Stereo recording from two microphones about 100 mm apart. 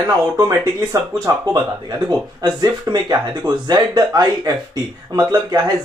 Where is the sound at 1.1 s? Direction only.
40° right (ahead or behind).